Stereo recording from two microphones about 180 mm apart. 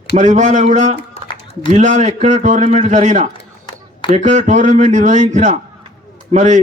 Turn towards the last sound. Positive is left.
turn(degrees=-40)  # may be behind; listen again after turning